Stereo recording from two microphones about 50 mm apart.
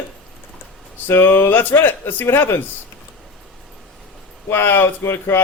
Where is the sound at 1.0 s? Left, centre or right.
Left.